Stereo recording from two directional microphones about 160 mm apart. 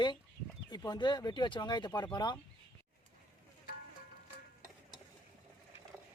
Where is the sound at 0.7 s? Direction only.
30° left (ahead or behind).